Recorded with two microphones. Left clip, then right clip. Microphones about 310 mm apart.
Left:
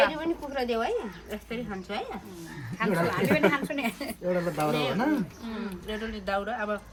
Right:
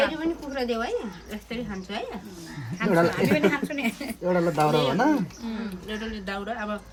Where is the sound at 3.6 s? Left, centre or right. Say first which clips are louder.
Right 2 dB; centre.